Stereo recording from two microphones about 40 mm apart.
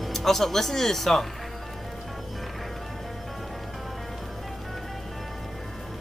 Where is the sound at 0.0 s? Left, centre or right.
Centre.